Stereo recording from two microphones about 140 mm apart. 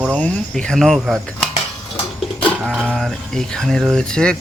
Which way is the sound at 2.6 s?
Centre (ahead or behind).